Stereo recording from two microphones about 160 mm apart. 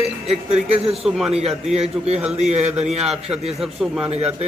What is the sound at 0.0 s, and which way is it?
Speech, 40° right (ahead or behind).